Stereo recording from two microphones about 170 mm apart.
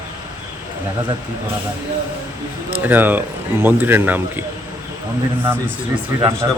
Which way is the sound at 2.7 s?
10° right (ahead or behind).